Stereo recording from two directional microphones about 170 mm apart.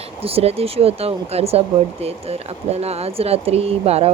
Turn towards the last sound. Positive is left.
turn(degrees=-35)  # may be behind; listen again after turning